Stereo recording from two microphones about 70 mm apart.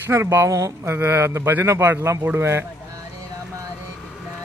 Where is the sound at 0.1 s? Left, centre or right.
Right.